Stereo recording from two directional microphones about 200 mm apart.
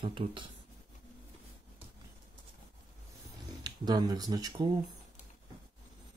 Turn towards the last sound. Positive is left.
turn(degrees=-20)  # may be behind; listen again after turning